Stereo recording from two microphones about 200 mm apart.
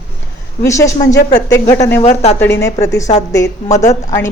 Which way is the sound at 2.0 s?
35° left (ahead or behind).